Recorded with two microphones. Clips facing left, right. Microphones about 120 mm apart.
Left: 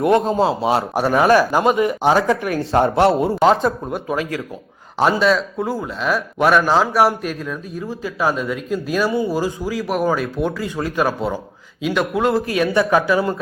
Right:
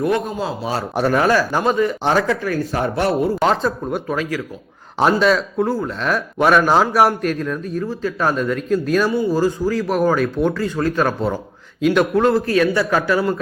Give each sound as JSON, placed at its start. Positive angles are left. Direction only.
{"t": 0.0, "sound": "speech", "side_deg": 25}
{"t": 0.9, "sound": "speech", "side_deg": 5}
{"t": 5.2, "sound": "a man's voice", "side_deg": 0}
{"t": 12.3, "sound": "speech", "side_deg": 15}